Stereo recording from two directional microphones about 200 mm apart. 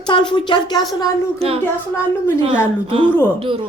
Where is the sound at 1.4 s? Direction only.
30° right (ahead or behind).